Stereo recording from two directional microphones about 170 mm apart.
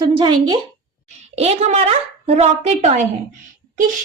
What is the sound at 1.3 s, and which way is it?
A woman's voice, 40° right (ahead or behind).